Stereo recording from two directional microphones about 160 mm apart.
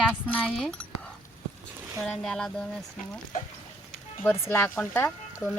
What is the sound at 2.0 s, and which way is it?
Speech, 5° left (ahead or behind).